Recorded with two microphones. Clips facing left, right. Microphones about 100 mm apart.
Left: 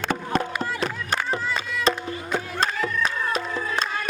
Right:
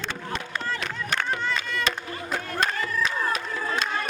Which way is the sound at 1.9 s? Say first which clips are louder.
Left 9 dB; 35° left (ahead or behind).